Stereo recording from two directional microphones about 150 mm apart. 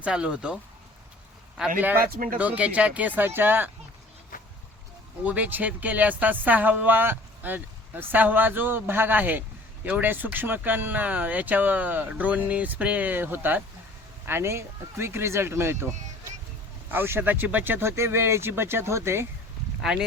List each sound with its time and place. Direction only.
0.0 s speech: 5° right (ahead or behind)
2.0 s speech: 75° right (ahead or behind)
2.4 s speech: 10° right (ahead or behind)
4.3 s vehicle: 65° left (ahead or behind)
5.2 s speech: 10° right (ahead or behind)
16.9 s speech: 15° right (ahead or behind)
19.8 s speech: 5° right (ahead or behind)